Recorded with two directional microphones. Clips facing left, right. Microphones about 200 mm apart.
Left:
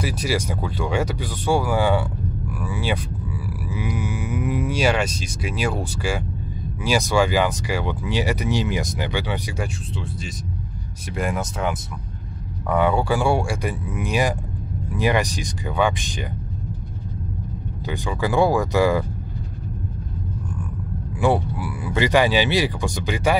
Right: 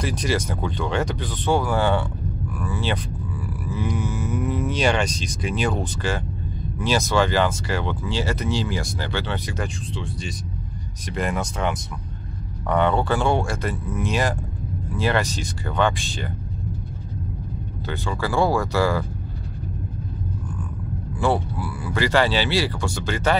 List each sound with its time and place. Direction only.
0.0 s speech: 5° left (ahead or behind)
17.8 s speech: 15° left (ahead or behind)
21.2 s speech: 15° left (ahead or behind)